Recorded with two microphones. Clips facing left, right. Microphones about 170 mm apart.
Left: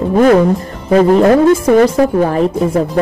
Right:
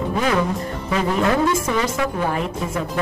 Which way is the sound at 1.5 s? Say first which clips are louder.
Left 13 dB; 55° left (ahead or behind).